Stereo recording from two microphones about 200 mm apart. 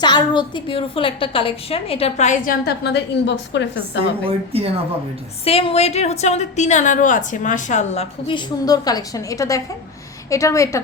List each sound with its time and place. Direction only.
0.0 s a woman's voice: 20° left (ahead or behind); by 3.7 s 60° left (ahead or behind)
4.2 s speech: 30° right (ahead or behind)
5.5 s a woman's voice: 30° left (ahead or behind)